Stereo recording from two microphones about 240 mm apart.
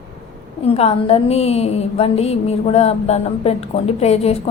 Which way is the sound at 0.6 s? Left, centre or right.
Left.